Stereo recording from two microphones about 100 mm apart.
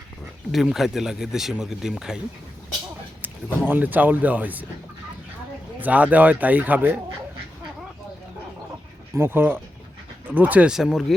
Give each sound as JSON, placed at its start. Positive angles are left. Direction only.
{"t": 0.5, "sound": "speech", "side_deg": 0}
{"t": 3.2, "sound": "speech", "side_deg": -20}
{"t": 5.8, "sound": "speech", "side_deg": -15}
{"t": 9.1, "sound": "speech", "side_deg": -25}